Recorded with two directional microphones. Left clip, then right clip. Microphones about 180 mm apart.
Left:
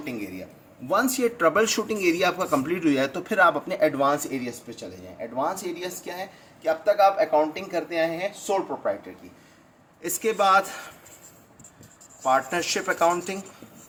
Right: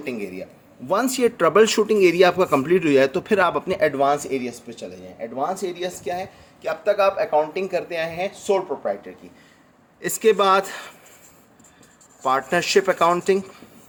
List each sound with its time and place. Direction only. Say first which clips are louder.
0.9 s speech: right 3 dB; 45° right (ahead or behind)
10.0 s speech: right 5 dB; 55° right (ahead or behind)
12.2 s speech: right 2 dB; 55° right (ahead or behind)